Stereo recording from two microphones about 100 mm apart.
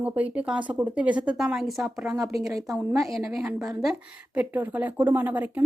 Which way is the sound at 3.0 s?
Centre (ahead or behind).